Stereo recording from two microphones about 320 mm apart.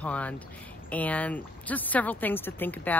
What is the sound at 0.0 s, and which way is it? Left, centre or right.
Speech, centre.